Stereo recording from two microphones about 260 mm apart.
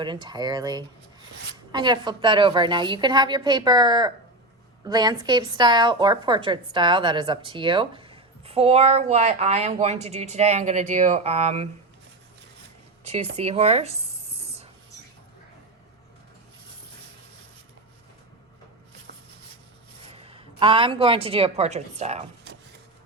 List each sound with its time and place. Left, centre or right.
0.0 s a woman's voice: centre
13.3 s writing: right
20.1 s a woman's voice: right